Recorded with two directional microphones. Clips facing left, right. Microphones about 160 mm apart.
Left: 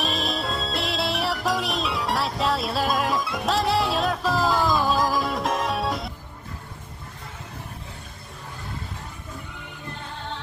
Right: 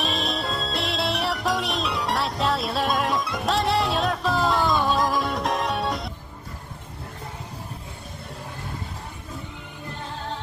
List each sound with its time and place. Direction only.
0.0 s music: centre (ahead or behind)